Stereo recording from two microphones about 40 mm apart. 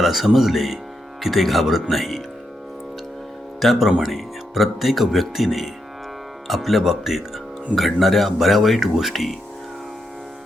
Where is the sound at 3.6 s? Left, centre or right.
Centre.